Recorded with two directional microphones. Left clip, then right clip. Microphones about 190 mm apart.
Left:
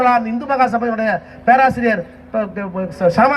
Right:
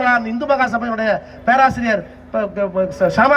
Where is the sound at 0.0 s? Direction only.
50° left (ahead or behind).